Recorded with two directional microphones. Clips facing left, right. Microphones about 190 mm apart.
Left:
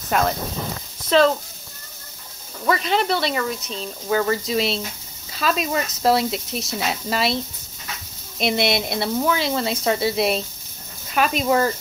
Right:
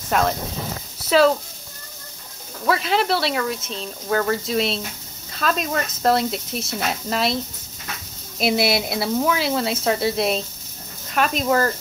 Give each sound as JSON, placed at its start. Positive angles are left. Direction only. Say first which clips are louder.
{"t": 0.1, "sound": "speech", "louder": "even", "side_deg": 0}
{"t": 2.6, "sound": "speech", "louder": "even", "side_deg": 0}
{"t": 8.4, "sound": "speech", "louder": "right 1 dB", "side_deg": -5}